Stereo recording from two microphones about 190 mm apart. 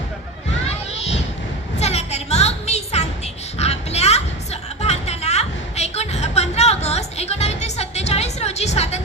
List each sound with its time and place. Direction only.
1.8 s music: 35° left (ahead or behind)
3.6 s a sound: 35° left (ahead or behind)
4.8 s music: 35° left (ahead or behind)